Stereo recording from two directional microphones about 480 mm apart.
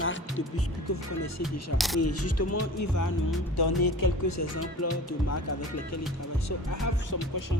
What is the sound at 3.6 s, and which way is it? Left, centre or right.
Speech, left.